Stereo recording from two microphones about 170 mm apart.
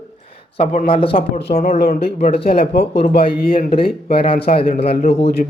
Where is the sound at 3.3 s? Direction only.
60° left (ahead or behind).